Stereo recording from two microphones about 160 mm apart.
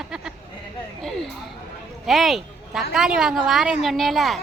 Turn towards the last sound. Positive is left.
turn(degrees=0)  # may be behind; listen again after turning